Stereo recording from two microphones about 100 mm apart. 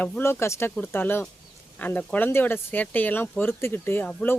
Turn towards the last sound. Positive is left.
turn(degrees=15)  # may be behind; listen again after turning